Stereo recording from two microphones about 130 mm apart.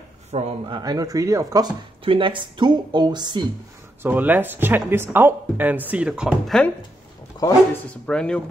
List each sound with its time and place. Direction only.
0.3 s a man's voice: 55° right (ahead or behind)
0.7 s speech: 30° right (ahead or behind)
2.0 s speech: 40° right (ahead or behind)
4.0 s speech: 15° right (ahead or behind); by 6.7 s centre (ahead or behind)
7.3 s a sound: 35° left (ahead or behind)
7.7 s speech: 5° left (ahead or behind)